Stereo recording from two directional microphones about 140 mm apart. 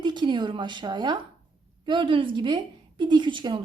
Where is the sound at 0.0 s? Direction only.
30° right (ahead or behind).